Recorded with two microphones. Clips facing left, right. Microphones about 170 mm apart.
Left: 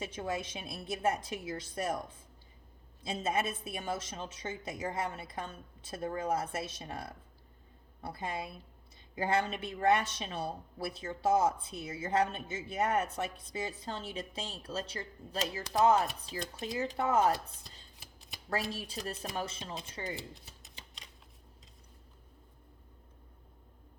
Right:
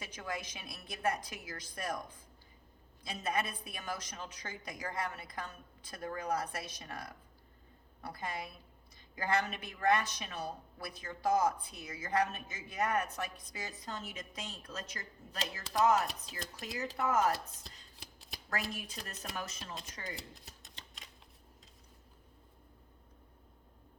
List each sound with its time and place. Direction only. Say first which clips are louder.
0.0 s speech: left 5 dB; 25° left (ahead or behind)
18.5 s speech: left 4 dB; 30° left (ahead or behind)
20.3 s shuffling cards: left 2 dB; centre (ahead or behind)